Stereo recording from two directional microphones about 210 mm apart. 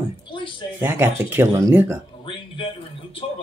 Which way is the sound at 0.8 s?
10° right (ahead or behind).